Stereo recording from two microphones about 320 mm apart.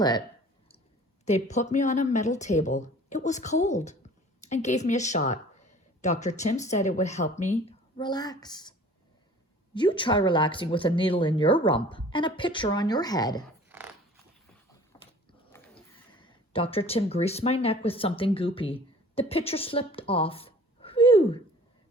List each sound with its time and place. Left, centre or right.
1.2 s speech: left
9.7 s speech: centre
13.4 s a sound: centre
14.9 s biting: centre
15.5 s a sound: centre
16.2 s speech: centre